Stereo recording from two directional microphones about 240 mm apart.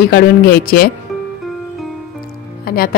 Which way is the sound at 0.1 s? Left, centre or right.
Left.